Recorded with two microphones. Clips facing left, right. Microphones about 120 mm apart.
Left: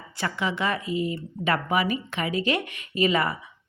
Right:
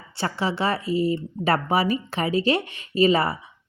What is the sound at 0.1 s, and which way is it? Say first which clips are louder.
A woman's voice: right 2 dB; 30° right (ahead or behind).